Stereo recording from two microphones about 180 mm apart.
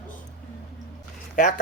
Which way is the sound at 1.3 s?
45° left (ahead or behind).